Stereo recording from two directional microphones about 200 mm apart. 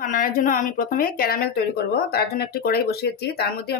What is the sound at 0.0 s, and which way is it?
Speech, 40° left (ahead or behind).